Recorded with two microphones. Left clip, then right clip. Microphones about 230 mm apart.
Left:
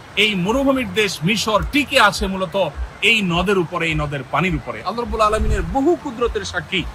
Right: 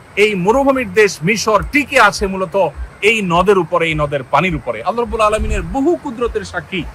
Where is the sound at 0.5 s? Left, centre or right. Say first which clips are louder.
Right 5 dB; right.